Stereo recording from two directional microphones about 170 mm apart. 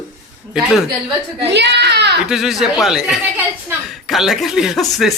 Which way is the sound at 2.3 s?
5° right (ahead or behind).